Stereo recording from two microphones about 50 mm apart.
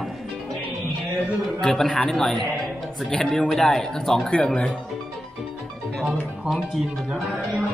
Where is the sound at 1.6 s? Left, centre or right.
Centre.